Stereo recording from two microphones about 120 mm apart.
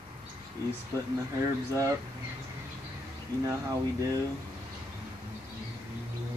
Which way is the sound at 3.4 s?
25° right (ahead or behind).